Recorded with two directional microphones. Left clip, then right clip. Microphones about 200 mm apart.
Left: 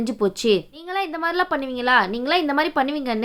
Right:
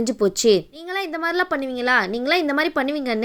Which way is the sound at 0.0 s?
20° right (ahead or behind).